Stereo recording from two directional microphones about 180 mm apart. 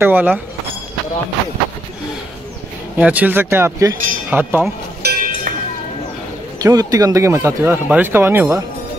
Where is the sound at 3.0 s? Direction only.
10° right (ahead or behind).